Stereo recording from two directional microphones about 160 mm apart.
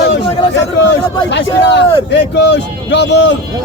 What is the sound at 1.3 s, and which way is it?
A man's voice, 90° left.